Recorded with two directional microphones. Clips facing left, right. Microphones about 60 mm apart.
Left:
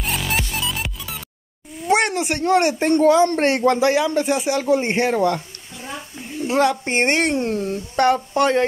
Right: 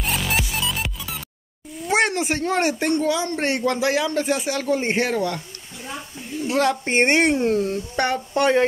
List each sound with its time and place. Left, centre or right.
0.0 s music: centre
1.9 s a sound: centre
2.9 s speech: left
3.6 s speech: left
3.9 s speech: centre
6.7 s speech: centre